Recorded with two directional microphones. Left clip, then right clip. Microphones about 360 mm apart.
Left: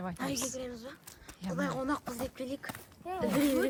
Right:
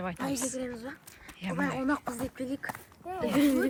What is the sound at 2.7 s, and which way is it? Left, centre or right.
Speech, centre.